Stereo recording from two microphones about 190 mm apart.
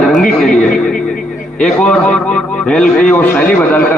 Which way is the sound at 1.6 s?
5° left (ahead or behind).